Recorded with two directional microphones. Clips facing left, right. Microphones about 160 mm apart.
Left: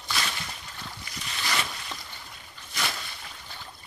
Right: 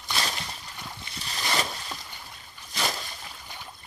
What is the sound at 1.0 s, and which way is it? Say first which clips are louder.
Boat: right 1 dB; 30° right (ahead or behind).